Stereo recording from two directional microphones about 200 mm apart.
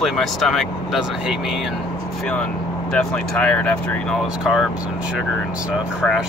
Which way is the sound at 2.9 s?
5° left (ahead or behind).